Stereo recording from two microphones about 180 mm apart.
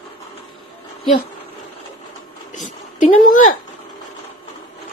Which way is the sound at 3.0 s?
45° left (ahead or behind).